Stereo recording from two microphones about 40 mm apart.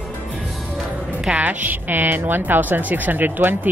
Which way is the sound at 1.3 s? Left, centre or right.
Right.